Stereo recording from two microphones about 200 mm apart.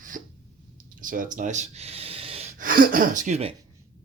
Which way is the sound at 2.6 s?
45° right (ahead or behind).